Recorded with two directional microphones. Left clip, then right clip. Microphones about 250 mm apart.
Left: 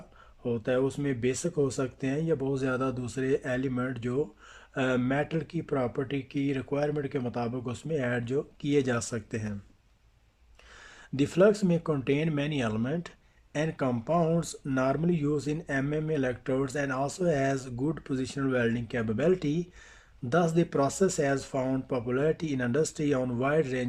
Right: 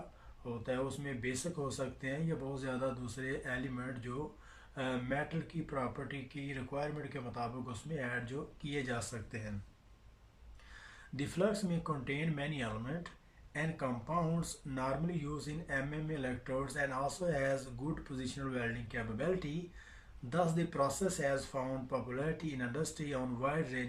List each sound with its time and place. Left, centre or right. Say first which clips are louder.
0.4 s speech: left 11 dB; left
11.2 s speech: left 12 dB; left